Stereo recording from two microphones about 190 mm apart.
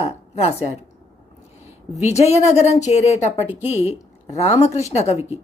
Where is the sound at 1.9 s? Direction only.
35° left (ahead or behind).